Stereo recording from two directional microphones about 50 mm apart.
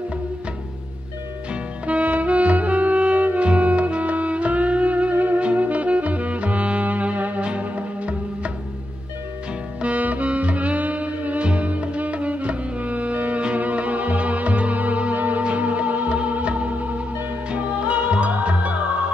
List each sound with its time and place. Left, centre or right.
1.5 s music: right
9.8 s music: right